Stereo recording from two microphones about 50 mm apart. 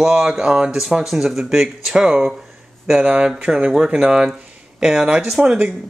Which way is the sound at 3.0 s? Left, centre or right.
Right.